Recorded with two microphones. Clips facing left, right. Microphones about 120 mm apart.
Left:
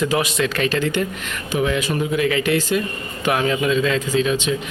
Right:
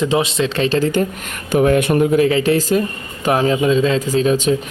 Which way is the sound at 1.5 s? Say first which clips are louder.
Right 7 dB; 45° right (ahead or behind).